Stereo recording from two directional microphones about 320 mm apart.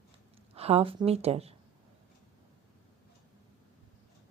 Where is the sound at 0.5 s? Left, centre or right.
Centre.